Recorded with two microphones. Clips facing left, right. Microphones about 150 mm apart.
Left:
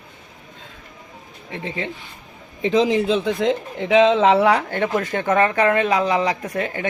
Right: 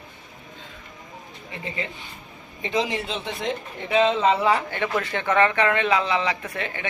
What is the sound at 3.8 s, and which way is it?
Speech, 90° left.